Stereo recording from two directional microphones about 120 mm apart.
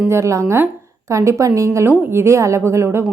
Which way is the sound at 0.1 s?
25° right (ahead or behind).